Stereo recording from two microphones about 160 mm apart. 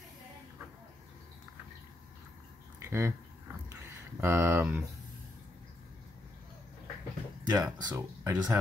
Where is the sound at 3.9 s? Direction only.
15° right (ahead or behind).